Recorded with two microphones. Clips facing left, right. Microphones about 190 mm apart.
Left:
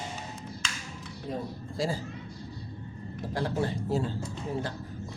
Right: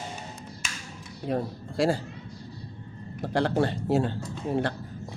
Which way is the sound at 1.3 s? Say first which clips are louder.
Right 6 dB; 70° right (ahead or behind).